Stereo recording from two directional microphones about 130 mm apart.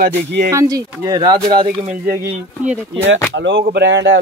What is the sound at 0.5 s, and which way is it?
Speech, 25° right (ahead or behind).